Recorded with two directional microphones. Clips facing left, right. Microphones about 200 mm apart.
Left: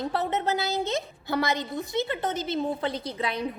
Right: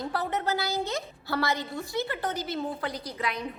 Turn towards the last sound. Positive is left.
turn(degrees=30)  # may be behind; listen again after turning